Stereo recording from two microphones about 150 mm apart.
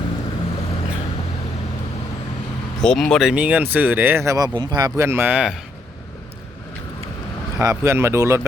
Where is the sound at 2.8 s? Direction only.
5° left (ahead or behind).